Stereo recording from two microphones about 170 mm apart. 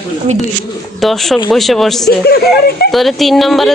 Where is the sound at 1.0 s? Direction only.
Centre (ahead or behind).